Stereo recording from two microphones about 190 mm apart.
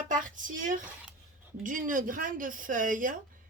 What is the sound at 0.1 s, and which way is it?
Speech, 45° right (ahead or behind).